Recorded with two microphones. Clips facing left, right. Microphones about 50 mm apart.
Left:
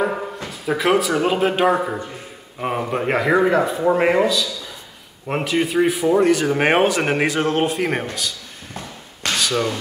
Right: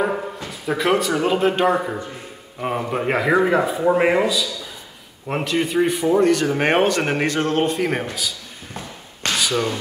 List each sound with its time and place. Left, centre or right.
0.7 s a man's voice: centre